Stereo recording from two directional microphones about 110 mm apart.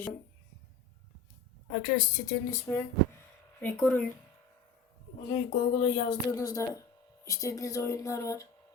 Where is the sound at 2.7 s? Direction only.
20° left (ahead or behind).